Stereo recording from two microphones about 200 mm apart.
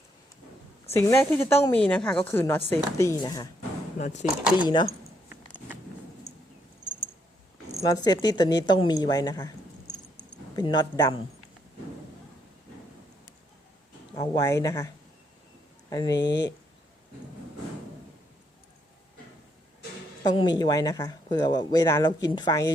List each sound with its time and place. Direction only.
0.9 s a woman's voice: 15° left (ahead or behind)
3.9 s speech: 35° left (ahead or behind)
4.6 s a woman's voice: 20° left (ahead or behind)
7.9 s a woman's voice: 20° left (ahead or behind)
14.2 s speech: 15° left (ahead or behind)
15.9 s speech: 20° left (ahead or behind)
20.2 s a woman's voice: 20° left (ahead or behind)